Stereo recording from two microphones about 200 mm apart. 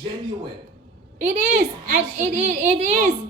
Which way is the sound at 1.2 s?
40° right (ahead or behind).